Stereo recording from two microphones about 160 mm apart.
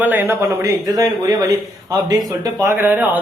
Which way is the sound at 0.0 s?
10° right (ahead or behind).